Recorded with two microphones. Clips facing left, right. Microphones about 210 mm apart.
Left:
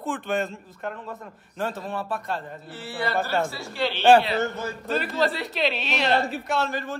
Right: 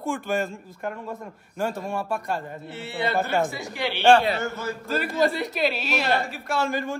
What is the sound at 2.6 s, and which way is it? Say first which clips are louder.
A man's voice: right 2 dB; 25° right (ahead or behind).